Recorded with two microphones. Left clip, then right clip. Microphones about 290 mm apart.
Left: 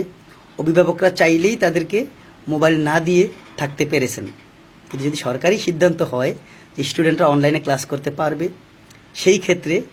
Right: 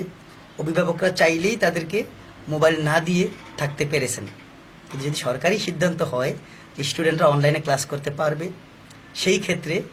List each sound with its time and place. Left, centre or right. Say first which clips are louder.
0.5 s speech: left 7 dB; left
6.7 s speech: left 4 dB; left